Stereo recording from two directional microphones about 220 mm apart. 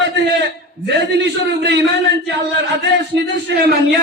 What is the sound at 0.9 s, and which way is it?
Speech, 50° right (ahead or behind).